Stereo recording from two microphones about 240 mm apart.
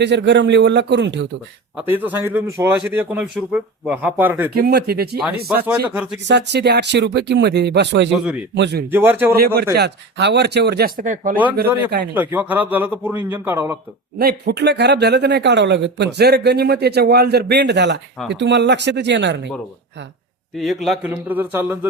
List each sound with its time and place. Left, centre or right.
0.0 s speech: right
1.7 s speech: centre
4.5 s speech: right
5.6 s speech: centre
6.2 s speech: right
8.1 s a man's voice: centre
8.5 s speech: right
8.9 s speech: centre
9.7 s speech: right
12.1 s speech: centre
14.2 s speech: right
20.8 s speech: centre